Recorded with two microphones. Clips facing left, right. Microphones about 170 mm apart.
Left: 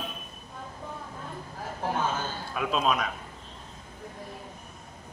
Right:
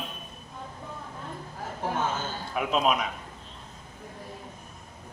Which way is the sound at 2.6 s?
15° right (ahead or behind).